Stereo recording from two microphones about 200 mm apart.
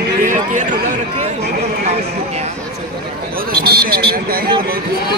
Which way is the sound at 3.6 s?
50° right (ahead or behind).